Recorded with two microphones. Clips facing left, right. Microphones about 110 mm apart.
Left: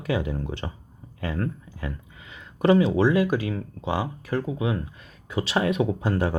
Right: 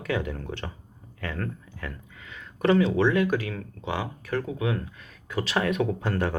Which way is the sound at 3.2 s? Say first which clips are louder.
Left 2 dB; 20° left (ahead or behind).